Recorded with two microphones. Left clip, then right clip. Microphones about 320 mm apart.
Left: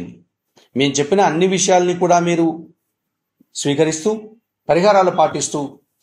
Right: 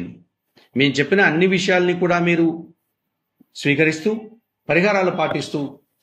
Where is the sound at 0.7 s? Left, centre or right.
Centre.